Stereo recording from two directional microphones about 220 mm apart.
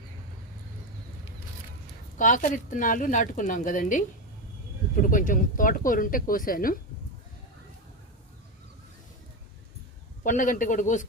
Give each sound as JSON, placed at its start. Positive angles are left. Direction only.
{"t": 2.1, "sound": "a woman's voice", "side_deg": 35}
{"t": 10.2, "sound": "a woman's voice", "side_deg": 35}